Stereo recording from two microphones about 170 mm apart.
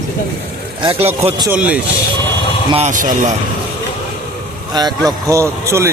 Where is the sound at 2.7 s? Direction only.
45° right (ahead or behind).